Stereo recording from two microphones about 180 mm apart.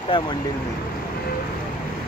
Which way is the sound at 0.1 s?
30° left (ahead or behind).